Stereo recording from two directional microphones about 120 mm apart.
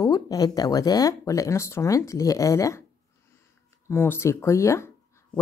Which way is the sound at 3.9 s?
20° left (ahead or behind).